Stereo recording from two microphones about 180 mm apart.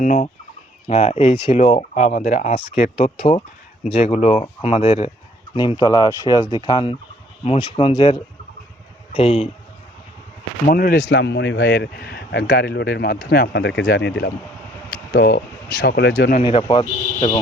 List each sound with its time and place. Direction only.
0.0 s a man's voice: 45° left (ahead or behind)
10.7 s a man's voice: 50° left (ahead or behind)
11.1 s speech: 70° left (ahead or behind)
16.4 s speech: 30° left (ahead or behind)